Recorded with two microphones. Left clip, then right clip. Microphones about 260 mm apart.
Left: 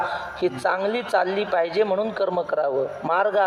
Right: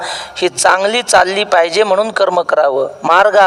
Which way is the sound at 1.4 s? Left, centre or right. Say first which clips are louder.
Right 10 dB; right.